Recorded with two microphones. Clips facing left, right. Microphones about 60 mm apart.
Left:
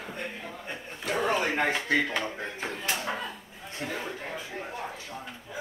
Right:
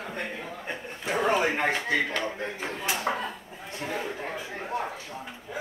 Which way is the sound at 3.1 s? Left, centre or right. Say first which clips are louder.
Right 4 dB; right.